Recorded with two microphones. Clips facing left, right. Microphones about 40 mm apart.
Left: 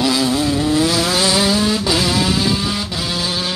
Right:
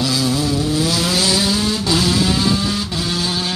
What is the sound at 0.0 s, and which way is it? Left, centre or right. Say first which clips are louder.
Vehicle: left 2 dB; centre.